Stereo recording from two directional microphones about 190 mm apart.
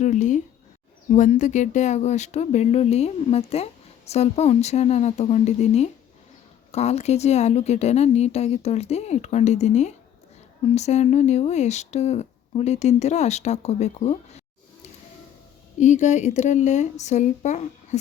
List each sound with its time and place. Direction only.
0.0 s speech: 40° left (ahead or behind)
15.8 s speech: 40° left (ahead or behind)